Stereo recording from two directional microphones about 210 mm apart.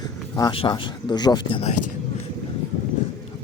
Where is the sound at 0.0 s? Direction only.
20° left (ahead or behind).